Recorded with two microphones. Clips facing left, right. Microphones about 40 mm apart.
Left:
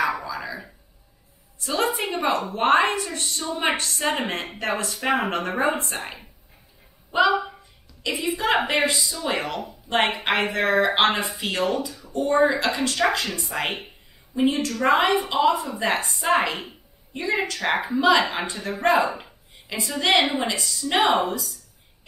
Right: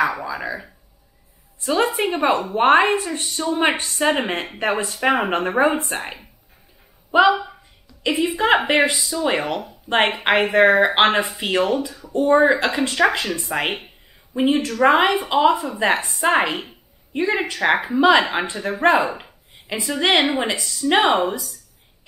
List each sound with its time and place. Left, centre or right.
0.0 s a sound: right
1.6 s a sound: right
2.0 s a woman's voice: right
3.7 s a woman's voice: right
7.1 s speech: right
8.0 s a woman's voice: right; by 12.1 s centre
12.1 s a woman's voice: right
16.2 s a sound: right
17.5 s a woman's voice: right